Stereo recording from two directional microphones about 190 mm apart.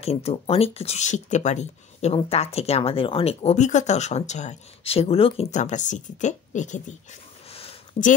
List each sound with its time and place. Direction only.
0.0 s speech: 35° left (ahead or behind)